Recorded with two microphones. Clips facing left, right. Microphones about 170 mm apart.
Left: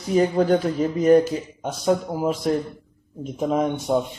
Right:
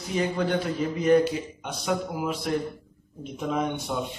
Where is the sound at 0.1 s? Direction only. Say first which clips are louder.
Left 7 dB; 40° left (ahead or behind).